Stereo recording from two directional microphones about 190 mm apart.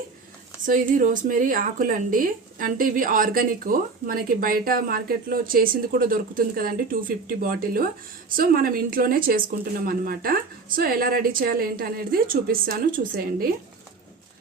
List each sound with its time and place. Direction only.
0.6 s speech: 45° right (ahead or behind)